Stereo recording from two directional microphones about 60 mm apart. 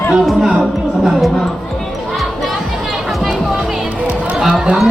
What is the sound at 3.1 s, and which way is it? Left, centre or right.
Music, centre.